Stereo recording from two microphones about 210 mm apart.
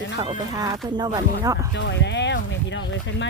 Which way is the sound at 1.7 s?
55° left (ahead or behind).